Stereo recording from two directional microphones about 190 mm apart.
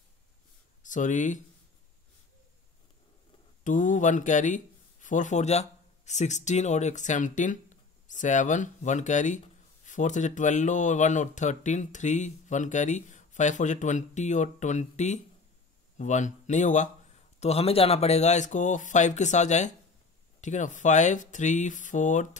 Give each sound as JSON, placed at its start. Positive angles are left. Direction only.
{"t": 0.8, "sound": "speech", "side_deg": 40}
{"t": 3.6, "sound": "speech", "side_deg": 40}